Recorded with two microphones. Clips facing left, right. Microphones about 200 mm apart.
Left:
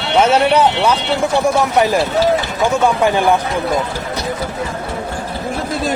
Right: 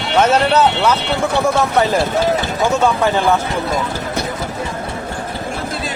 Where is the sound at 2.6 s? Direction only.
15° left (ahead or behind).